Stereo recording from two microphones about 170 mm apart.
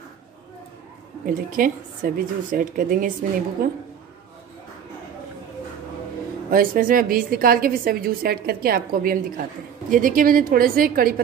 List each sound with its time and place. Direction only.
1.2 s a woman's voice: 55° right (ahead or behind)
6.5 s a woman's voice: 55° right (ahead or behind)